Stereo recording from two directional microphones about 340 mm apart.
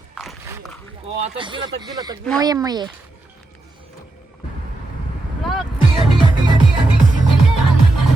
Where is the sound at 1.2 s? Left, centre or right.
Centre.